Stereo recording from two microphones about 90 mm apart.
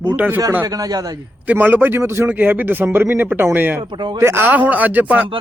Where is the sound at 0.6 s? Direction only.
45° right (ahead or behind).